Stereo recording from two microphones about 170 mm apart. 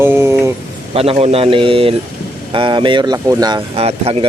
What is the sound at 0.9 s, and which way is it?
Speech, 35° right (ahead or behind).